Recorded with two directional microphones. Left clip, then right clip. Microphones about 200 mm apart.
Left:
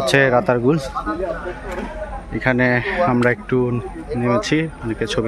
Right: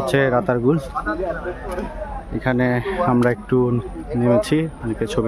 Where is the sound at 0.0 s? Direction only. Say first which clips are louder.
Left 3 dB; 5° left (ahead or behind).